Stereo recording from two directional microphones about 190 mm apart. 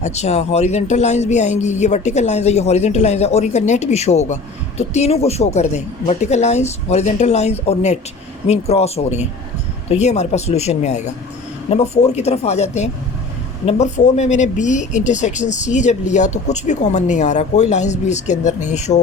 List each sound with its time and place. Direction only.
0.0 s speech: 35° left (ahead or behind)